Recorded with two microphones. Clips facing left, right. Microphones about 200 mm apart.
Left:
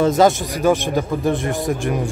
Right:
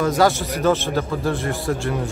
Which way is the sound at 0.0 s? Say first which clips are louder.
Left 3 dB; 20° left (ahead or behind).